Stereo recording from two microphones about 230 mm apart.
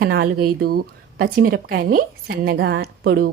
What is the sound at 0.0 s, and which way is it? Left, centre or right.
A woman's voice, right.